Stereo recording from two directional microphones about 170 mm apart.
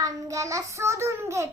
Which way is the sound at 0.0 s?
20° right (ahead or behind).